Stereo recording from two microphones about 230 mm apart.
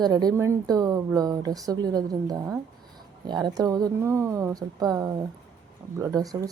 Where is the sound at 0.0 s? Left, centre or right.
Centre.